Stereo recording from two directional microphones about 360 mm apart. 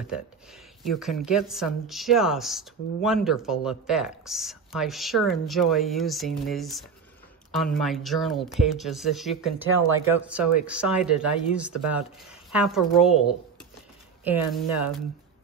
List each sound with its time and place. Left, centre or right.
0.0 s a woman's voice: centre
14.2 s a woman's voice: centre